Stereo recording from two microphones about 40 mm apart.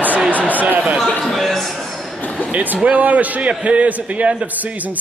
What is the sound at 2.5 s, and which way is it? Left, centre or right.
A man's voice, right.